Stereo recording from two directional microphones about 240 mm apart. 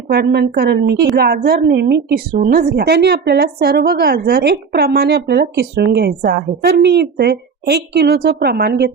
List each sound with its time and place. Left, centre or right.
0.1 s a woman's voice: right